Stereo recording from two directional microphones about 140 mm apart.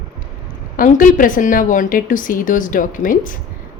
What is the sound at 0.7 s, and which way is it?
A woman's voice, 70° left (ahead or behind).